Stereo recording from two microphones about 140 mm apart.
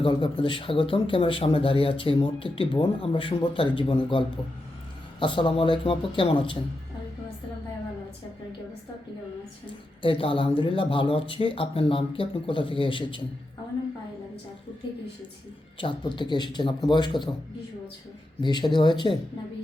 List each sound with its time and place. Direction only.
0.0 s speech: 35° left (ahead or behind)
5.2 s speech: 35° left (ahead or behind)
9.6 s speech: 35° left (ahead or behind)
15.8 s speech: 35° left (ahead or behind)
18.3 s speech: 30° left (ahead or behind)